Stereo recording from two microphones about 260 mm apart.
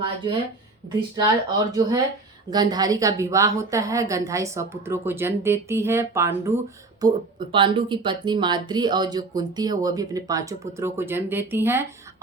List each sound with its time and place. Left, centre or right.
1.1 s speech: centre